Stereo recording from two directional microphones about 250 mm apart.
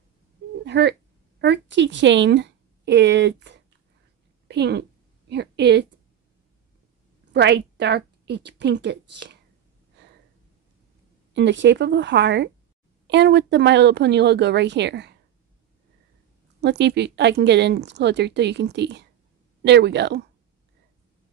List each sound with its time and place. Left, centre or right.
0.7 s a woman's voice: right
7.3 s a woman's voice: right
11.3 s speech: right
16.6 s speech: right